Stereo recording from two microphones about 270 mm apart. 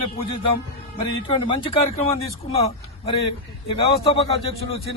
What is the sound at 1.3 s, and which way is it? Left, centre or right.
A man's voice, centre.